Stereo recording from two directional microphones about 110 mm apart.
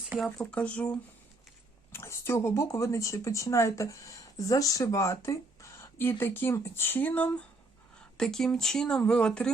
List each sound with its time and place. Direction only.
0.3 s speech: 10° left (ahead or behind)
1.9 s speech: 25° left (ahead or behind); by 9.5 s 10° left (ahead or behind)